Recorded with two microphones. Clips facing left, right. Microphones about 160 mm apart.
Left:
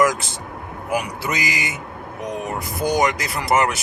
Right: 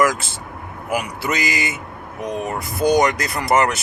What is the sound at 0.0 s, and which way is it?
Speech, 15° left (ahead or behind).